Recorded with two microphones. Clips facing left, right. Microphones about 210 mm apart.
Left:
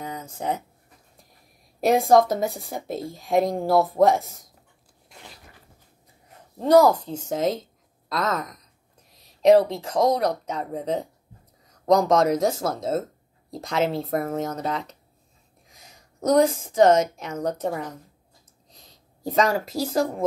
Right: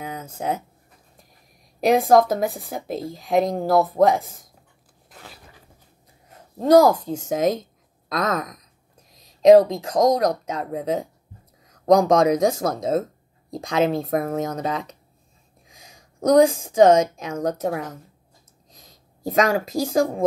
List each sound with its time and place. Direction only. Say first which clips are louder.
0.0 s a sound: right 2 dB; 5° right (ahead or behind)
1.8 s speech: right 1 dB; centre (ahead or behind)
5.1 s zipper: right 2 dB; centre (ahead or behind)
6.6 s speech: right 2 dB; 10° right (ahead or behind)
9.1 s a sound: right 4 dB; 15° right (ahead or behind)
9.7 s a woman's voice: right 3 dB; 15° right (ahead or behind)